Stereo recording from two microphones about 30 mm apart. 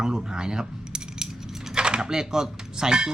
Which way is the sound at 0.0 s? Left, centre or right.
Right.